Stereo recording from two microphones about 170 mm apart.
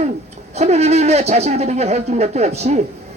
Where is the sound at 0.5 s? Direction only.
40° right (ahead or behind).